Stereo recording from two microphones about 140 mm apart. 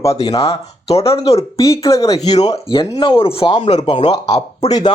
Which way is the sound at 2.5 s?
40° left (ahead or behind).